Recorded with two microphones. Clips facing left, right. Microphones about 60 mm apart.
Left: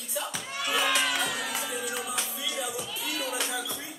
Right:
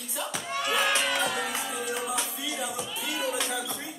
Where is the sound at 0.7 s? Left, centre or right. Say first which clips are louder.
Even; centre.